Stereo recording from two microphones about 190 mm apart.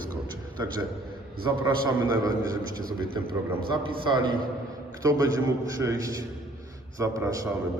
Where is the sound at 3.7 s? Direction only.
25° right (ahead or behind).